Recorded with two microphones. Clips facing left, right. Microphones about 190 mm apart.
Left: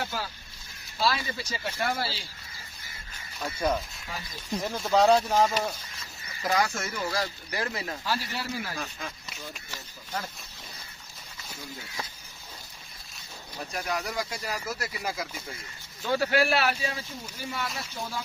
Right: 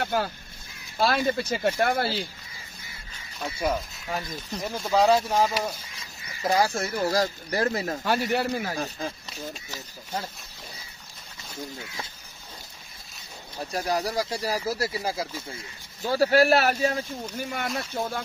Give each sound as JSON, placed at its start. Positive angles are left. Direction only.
{"t": 0.0, "sound": "a sound", "side_deg": -55}
{"t": 0.9, "sound": "speech", "side_deg": -55}
{"t": 3.5, "sound": "speech", "side_deg": -5}
{"t": 6.4, "sound": "speech", "side_deg": -30}
{"t": 8.7, "sound": "speech", "side_deg": -35}
{"t": 13.7, "sound": "speech", "side_deg": -35}
{"t": 17.4, "sound": "speech", "side_deg": -55}